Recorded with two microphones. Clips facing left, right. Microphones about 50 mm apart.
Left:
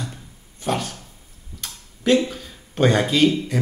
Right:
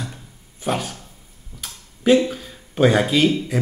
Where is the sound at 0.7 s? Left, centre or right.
Centre.